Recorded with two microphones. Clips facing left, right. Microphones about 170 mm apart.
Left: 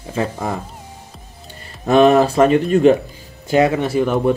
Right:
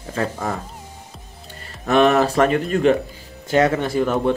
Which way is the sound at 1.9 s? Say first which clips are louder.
Left 4 dB; 30° left (ahead or behind).